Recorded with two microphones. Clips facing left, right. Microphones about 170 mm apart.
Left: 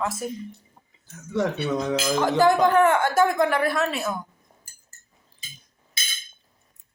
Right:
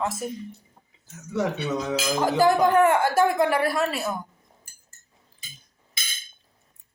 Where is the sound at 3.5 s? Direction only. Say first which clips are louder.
Even; 5° right (ahead or behind).